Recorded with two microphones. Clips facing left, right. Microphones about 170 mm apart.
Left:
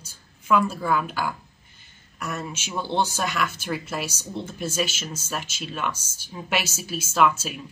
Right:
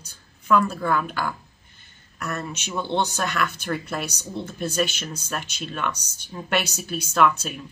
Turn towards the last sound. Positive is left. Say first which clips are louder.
# right 1 dB
turn(degrees=5)  # may be behind; listen again after turning